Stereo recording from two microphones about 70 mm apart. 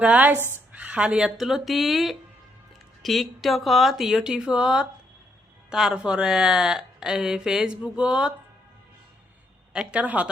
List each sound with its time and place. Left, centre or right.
0.0 s speech: right
9.7 s speech: centre